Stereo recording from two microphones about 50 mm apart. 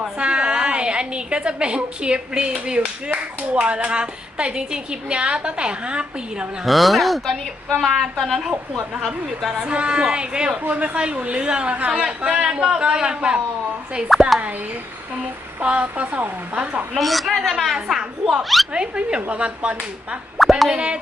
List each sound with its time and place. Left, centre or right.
0.0 s a woman's voice: right
6.7 s speech: centre
9.6 s a woman's voice: right
14.1 s speech: centre
15.6 s a woman's voice: right
16.9 s speech: centre
18.7 s a woman's voice: centre
20.4 s speech: centre
20.7 s a woman's voice: right